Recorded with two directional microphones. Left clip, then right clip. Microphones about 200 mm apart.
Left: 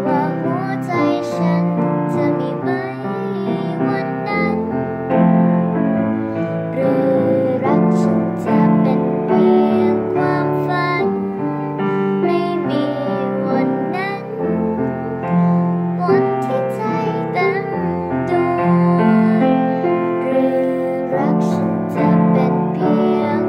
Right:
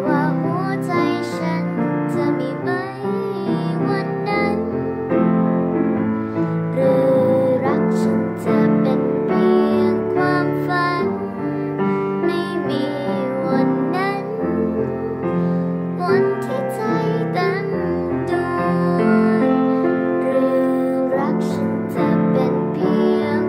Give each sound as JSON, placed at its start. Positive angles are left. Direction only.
{"t": 0.9, "sound": "music", "side_deg": -15}
{"t": 6.8, "sound": "music", "side_deg": -15}
{"t": 18.9, "sound": "music", "side_deg": -15}